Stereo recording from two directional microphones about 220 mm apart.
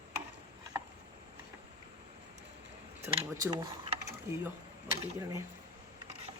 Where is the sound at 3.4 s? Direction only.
20° right (ahead or behind).